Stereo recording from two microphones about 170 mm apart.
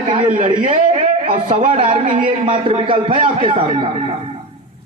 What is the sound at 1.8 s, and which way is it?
Speech, 50° right (ahead or behind).